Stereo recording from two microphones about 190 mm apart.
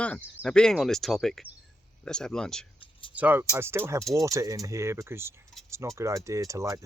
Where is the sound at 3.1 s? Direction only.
10° right (ahead or behind).